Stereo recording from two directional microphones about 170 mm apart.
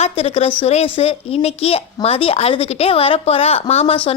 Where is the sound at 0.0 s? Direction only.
35° left (ahead or behind).